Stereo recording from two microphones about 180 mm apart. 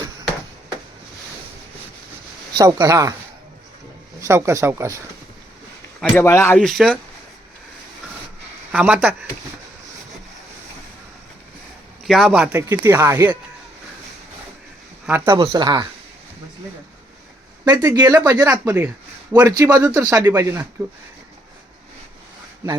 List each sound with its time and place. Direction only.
2.5 s speech: 20° right (ahead or behind)
4.2 s speech: 15° right (ahead or behind)
6.1 s speech: 15° left (ahead or behind)
6.6 s speech: centre (ahead or behind)
8.7 s speech: 5° right (ahead or behind)
12.0 s speech: 5° right (ahead or behind)
15.0 s speech: 10° right (ahead or behind)
15.4 s speech: 25° right (ahead or behind)
17.7 s speech: 20° right (ahead or behind)